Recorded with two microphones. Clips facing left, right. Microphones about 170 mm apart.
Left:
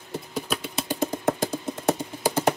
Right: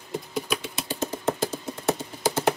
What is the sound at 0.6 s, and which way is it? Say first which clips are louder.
Typewriter: left 3 dB; 15° left (ahead or behind).